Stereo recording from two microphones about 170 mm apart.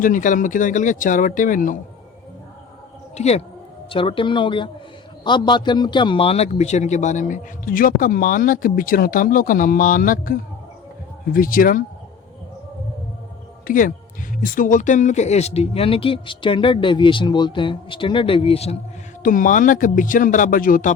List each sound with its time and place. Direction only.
0.0 s a man's voice: 50° left (ahead or behind)
3.2 s a man's voice: 40° left (ahead or behind); by 11.8 s 55° left (ahead or behind)
13.7 s a man's voice: 55° left (ahead or behind); by 18.8 s 35° left (ahead or behind)
19.2 s a man's voice: 50° left (ahead or behind)